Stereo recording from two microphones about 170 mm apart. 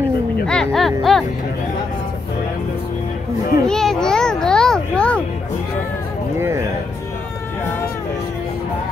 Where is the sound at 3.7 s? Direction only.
5° left (ahead or behind).